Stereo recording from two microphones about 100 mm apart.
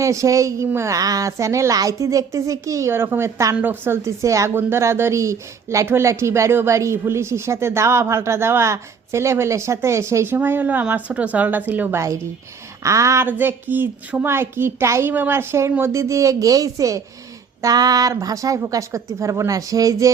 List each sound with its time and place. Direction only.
0.0 s a woman's voice: 30° right (ahead or behind)
3.5 s speech: 20° right (ahead or behind)
11.9 s a woman's voice: 30° right (ahead or behind)
13.2 s a woman's voice: 20° right (ahead or behind); by 20.1 s 35° right (ahead or behind)